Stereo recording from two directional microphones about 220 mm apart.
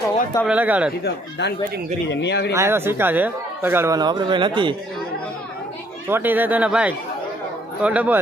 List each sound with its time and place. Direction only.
0.4 s speech: 5° right (ahead or behind)
1.0 s speech: 50° left (ahead or behind)
2.5 s speech: 10° right (ahead or behind)
6.1 s speech: 10° right (ahead or behind)